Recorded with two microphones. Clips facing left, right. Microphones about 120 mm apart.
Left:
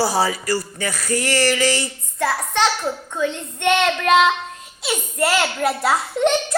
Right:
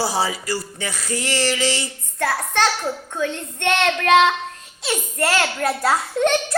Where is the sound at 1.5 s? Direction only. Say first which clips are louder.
Left 3 dB; 50° left (ahead or behind).